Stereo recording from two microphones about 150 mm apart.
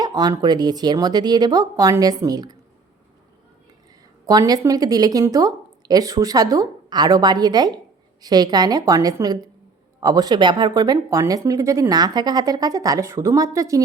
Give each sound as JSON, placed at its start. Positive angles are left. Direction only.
{"t": 0.0, "sound": "speech", "side_deg": -25}
{"t": 4.3, "sound": "speech", "side_deg": -25}